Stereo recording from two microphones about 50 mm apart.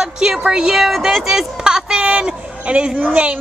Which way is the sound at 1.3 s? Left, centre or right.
Centre.